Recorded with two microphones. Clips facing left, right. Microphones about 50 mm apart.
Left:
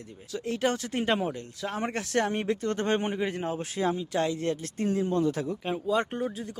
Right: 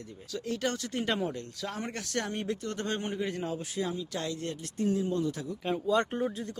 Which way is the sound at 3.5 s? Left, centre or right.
Left.